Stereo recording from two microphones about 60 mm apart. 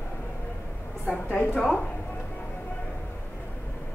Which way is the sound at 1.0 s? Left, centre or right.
Left.